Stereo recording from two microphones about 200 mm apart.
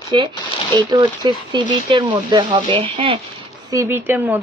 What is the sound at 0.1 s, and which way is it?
Speech, 25° right (ahead or behind).